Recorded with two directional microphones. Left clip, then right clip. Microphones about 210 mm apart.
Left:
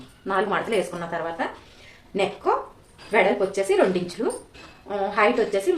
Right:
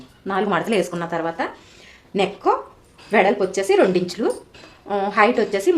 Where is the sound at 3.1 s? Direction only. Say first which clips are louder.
Right 3 dB; 50° right (ahead or behind).